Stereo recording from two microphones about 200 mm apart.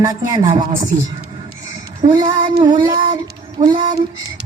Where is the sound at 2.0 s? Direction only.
20° right (ahead or behind).